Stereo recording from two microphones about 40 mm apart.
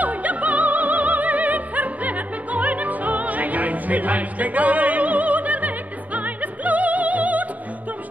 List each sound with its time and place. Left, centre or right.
0.0 s opera: right